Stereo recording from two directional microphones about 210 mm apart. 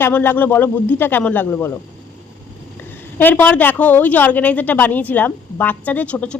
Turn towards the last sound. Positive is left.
turn(degrees=5)  # may be behind; listen again after turning